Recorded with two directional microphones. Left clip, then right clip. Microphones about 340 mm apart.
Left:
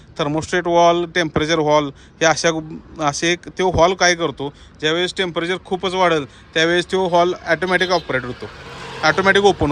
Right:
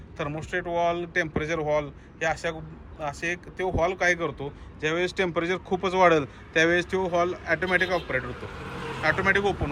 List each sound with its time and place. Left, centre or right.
0.2 s speech: centre